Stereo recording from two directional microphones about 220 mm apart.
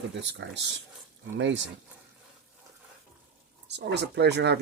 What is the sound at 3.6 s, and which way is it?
Speech, 50° right (ahead or behind).